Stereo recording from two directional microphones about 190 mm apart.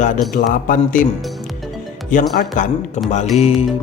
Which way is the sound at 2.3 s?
40° left (ahead or behind).